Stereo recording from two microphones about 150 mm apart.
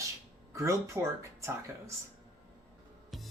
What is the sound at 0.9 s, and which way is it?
Speech, 15° right (ahead or behind).